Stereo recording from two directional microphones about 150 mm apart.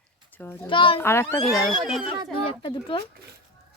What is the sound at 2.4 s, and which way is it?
Speech, 30° left (ahead or behind).